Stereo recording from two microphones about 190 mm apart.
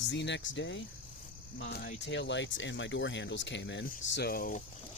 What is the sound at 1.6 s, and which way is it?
Speech, 60° left (ahead or behind).